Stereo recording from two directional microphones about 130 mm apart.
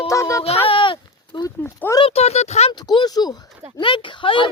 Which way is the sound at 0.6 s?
40° left (ahead or behind).